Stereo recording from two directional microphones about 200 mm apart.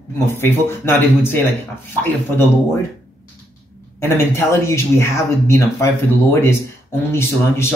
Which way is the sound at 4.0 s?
10° left (ahead or behind).